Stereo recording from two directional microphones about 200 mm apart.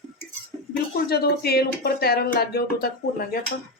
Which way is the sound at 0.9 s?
50° left (ahead or behind).